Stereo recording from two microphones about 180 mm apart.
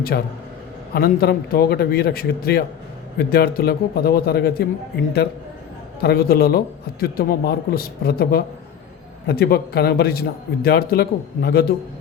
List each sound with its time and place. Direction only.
0.1 s a man's voice: 60° left (ahead or behind)
6.0 s a man's voice: 60° left (ahead or behind)